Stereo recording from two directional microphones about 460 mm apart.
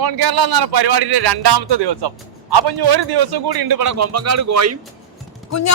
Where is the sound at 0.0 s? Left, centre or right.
Right.